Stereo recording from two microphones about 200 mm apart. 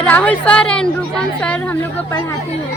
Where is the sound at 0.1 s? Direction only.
5° left (ahead or behind).